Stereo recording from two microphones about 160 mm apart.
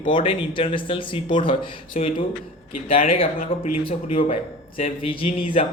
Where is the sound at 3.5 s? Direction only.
35° left (ahead or behind).